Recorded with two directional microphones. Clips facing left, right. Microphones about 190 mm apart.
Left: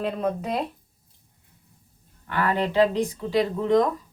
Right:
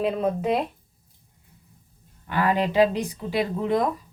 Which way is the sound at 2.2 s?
15° right (ahead or behind).